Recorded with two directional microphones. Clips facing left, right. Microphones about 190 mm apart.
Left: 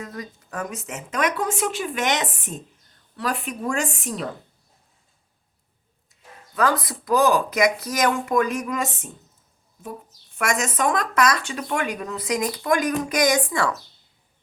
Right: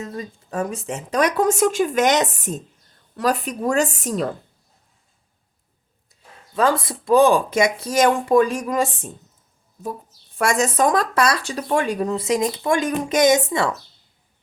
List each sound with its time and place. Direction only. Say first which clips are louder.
0.0 s speech: right 4 dB; 25° right (ahead or behind)
6.5 s speech: right 3 dB; 25° right (ahead or behind)
10.3 s speech: right 5 dB; 35° right (ahead or behind)